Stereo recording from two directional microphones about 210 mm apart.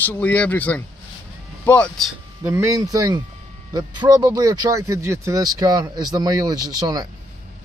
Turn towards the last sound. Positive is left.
turn(degrees=-20)  # may be behind; listen again after turning